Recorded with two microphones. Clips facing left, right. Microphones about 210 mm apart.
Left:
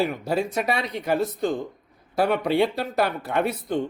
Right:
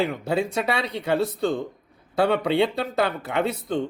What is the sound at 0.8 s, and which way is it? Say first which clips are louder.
Speech: right 1 dB; 30° right (ahead or behind).